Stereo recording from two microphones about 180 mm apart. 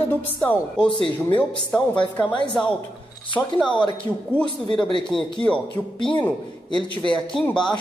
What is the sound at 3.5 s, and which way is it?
Speech, 25° left (ahead or behind).